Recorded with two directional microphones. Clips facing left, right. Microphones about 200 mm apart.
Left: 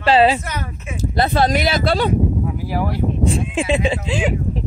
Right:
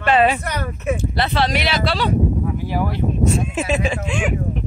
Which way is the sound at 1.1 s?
45° left (ahead or behind).